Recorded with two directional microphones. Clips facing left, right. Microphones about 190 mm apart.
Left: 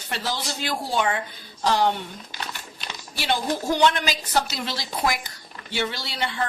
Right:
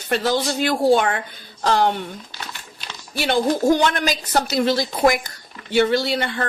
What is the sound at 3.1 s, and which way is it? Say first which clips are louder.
A woman's voice: right 6 dB; 55° right (ahead or behind).